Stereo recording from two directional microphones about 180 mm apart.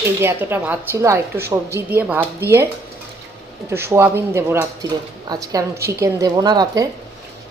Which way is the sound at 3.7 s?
15° right (ahead or behind).